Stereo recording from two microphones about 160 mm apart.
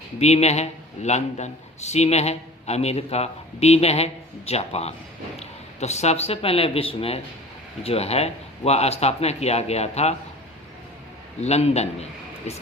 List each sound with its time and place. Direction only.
0.2 s a man's voice: 45° left (ahead or behind)
11.3 s a man's voice: 40° left (ahead or behind)